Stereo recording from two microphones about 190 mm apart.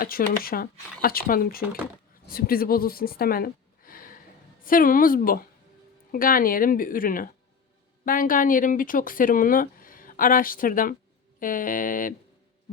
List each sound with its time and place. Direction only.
0.0 s speech: 50° left (ahead or behind)